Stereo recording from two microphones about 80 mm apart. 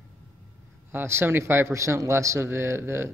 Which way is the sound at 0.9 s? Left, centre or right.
Right.